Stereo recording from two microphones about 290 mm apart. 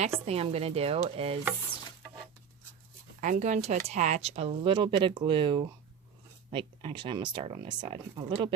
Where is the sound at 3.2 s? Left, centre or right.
Right.